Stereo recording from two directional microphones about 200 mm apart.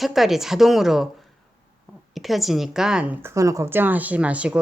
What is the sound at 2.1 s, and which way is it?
A woman's voice, centre (ahead or behind).